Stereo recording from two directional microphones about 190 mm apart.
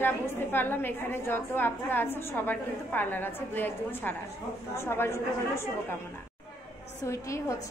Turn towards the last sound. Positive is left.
turn(degrees=15)  # may be behind; listen again after turning